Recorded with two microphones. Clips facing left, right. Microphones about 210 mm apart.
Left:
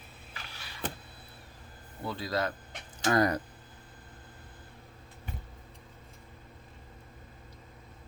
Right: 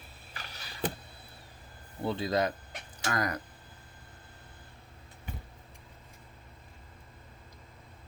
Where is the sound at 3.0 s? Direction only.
30° left (ahead or behind).